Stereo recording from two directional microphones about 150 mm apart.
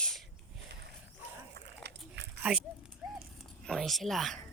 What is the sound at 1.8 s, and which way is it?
Biting, 90° right.